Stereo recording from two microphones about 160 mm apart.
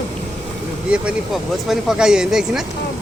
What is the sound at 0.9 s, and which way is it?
Speech, 5° right (ahead or behind).